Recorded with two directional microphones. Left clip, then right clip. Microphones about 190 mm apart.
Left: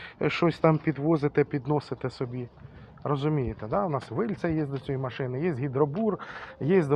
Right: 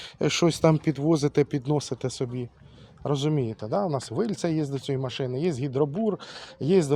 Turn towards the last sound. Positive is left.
turn(degrees=-35)  # may be behind; listen again after turning